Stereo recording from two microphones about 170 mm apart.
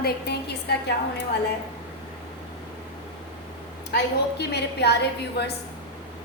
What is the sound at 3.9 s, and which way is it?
A woman's voice, 75° left (ahead or behind).